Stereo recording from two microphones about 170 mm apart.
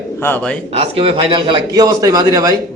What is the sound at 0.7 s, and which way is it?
A man's voice, 35° right (ahead or behind).